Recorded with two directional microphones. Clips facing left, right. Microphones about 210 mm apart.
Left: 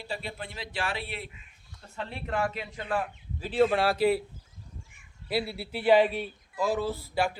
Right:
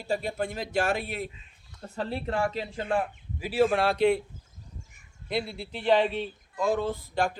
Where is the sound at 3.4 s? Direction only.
5° right (ahead or behind).